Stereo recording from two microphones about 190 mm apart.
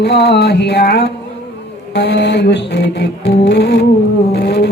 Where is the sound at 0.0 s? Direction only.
60° left (ahead or behind).